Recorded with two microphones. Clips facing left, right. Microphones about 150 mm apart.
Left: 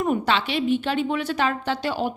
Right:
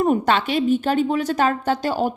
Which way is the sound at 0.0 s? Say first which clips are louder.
Right 4 dB; 45° right (ahead or behind).